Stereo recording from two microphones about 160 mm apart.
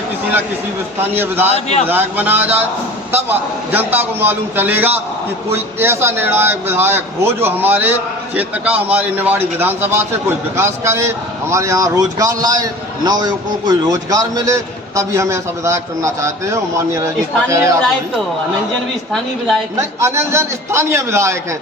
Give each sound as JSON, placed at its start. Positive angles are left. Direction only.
{"t": 1.0, "sound": "a man's voice", "side_deg": -15}
{"t": 19.7, "sound": "a man's voice", "side_deg": -15}